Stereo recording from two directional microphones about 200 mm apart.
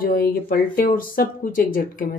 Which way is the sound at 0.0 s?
45° left (ahead or behind).